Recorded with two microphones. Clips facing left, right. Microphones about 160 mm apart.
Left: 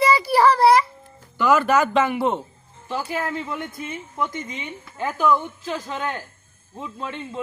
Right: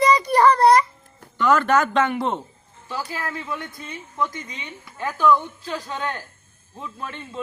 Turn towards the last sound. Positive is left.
turn(degrees=20)  # may be behind; listen again after turning